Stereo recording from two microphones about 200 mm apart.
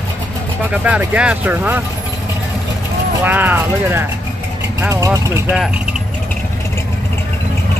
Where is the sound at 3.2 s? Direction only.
10° right (ahead or behind).